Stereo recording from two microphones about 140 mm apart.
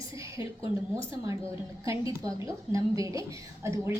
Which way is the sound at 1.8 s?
25° right (ahead or behind).